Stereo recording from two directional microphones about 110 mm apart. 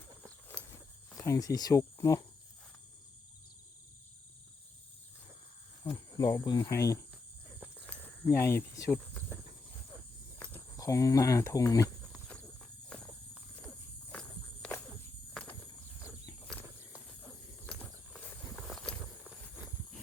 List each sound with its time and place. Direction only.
0.4 s cricket: 20° left (ahead or behind)
5.8 s speech: 30° left (ahead or behind)
8.2 s speech: 20° left (ahead or behind)
10.5 s speech: 30° left (ahead or behind)
12.1 s horse: 10° left (ahead or behind)
14.1 s walk: 10° left (ahead or behind)
17.7 s a sound: 10° left (ahead or behind)
18.7 s walk: 5° left (ahead or behind)